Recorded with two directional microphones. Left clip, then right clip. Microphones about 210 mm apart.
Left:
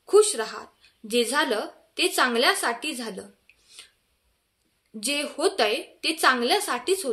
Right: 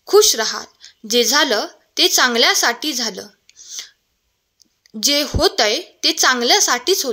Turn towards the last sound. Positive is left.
turn(degrees=-35)  # may be behind; listen again after turning